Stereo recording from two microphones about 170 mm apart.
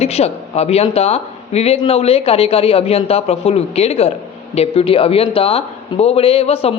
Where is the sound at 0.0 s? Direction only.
40° left (ahead or behind).